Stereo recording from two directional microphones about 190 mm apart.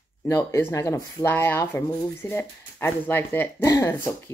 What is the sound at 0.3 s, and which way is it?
Speech, 15° left (ahead or behind).